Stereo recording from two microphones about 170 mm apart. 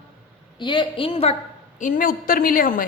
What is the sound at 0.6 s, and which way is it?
Speech, 25° left (ahead or behind).